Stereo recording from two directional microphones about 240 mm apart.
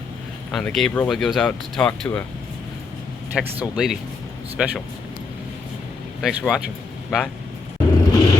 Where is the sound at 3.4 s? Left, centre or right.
Centre.